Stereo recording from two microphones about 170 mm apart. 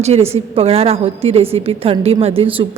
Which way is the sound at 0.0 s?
35° right (ahead or behind).